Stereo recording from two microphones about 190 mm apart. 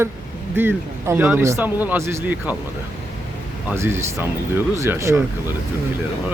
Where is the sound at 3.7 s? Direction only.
15° right (ahead or behind).